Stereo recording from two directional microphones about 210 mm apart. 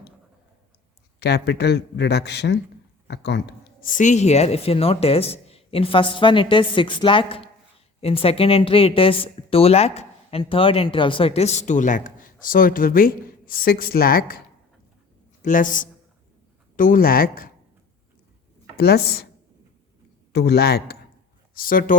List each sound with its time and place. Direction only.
1.2 s speech: 50° left (ahead or behind)
15.4 s speech: 40° left (ahead or behind)
18.8 s speech: 50° left (ahead or behind)
20.3 s speech: 50° left (ahead or behind)